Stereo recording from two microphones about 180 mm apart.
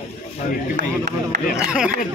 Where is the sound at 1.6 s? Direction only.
5° right (ahead or behind).